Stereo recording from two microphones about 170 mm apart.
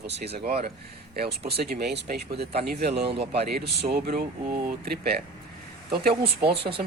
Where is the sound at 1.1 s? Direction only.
65° right (ahead or behind).